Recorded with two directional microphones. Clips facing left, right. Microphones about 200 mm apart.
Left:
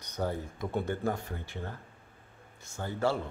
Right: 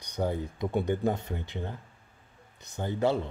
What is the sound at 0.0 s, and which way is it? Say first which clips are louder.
Speech: right 3 dB; 15° right (ahead or behind).